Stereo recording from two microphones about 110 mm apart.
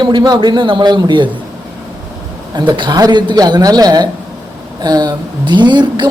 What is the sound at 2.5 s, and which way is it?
Speech, 40° right (ahead or behind).